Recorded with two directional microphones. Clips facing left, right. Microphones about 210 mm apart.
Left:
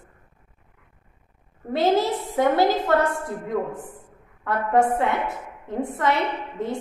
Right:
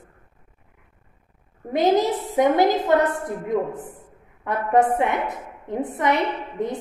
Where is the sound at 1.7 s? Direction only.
15° right (ahead or behind).